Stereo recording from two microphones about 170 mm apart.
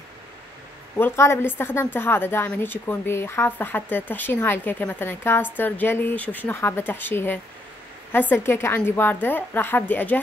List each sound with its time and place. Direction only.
0.9 s a woman's voice: 15° left (ahead or behind)